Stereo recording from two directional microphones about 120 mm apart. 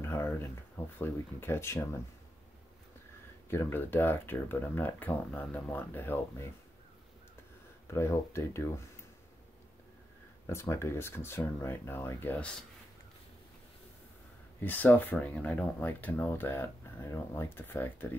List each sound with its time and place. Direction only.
0.0 s a sound: 20° left (ahead or behind)
0.9 s speech: 20° left (ahead or behind)
3.4 s speech: 20° left (ahead or behind)
7.9 s speech: 20° left (ahead or behind)
10.4 s speech: 25° left (ahead or behind)
14.6 s speech: 15° left (ahead or behind)